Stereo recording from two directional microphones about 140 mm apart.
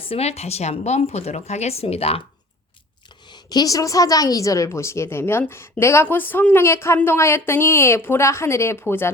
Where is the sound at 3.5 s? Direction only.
25° left (ahead or behind).